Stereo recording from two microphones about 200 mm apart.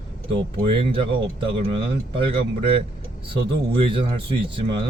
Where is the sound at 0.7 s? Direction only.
25° right (ahead or behind).